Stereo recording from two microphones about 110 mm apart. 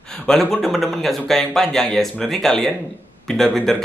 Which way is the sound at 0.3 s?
5° left (ahead or behind).